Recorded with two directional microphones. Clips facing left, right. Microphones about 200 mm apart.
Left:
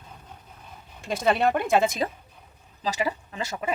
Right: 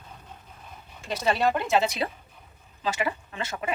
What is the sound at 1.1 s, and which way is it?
Speech, 55° left (ahead or behind).